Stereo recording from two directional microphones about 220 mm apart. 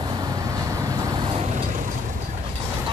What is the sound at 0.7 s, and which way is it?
Vehicle, 15° right (ahead or behind).